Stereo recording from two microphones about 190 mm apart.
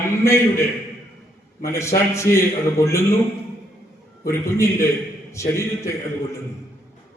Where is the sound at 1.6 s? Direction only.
15° left (ahead or behind).